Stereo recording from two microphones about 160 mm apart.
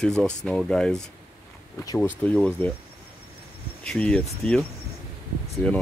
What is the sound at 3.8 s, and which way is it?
Speech, 5° left (ahead or behind).